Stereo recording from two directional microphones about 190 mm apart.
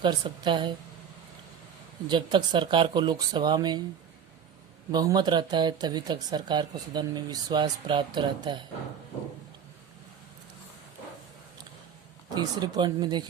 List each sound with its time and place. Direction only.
0.0 s speech: 25° right (ahead or behind)
2.0 s speech: 25° right (ahead or behind)
4.9 s speech: 20° right (ahead or behind)
12.3 s speech: 20° right (ahead or behind)